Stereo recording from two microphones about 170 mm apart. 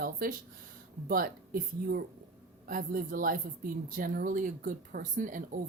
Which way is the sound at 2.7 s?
55° right (ahead or behind).